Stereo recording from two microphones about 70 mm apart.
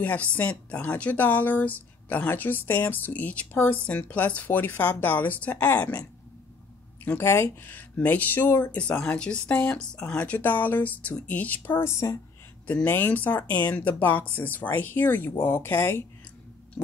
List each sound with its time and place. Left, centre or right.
0.0 s speech: left
7.2 s speech: left
7.7 s speech: left
8.7 s speech: centre; by 12.2 s left
12.8 s speech: left
16.8 s a sound: centre